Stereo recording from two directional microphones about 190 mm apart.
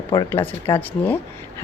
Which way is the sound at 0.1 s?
20° left (ahead or behind).